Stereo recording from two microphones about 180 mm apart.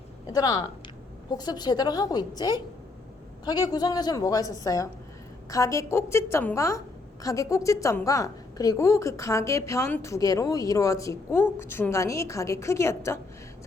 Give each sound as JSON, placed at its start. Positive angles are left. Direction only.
{"t": 0.3, "sound": "a woman's voice", "side_deg": 20}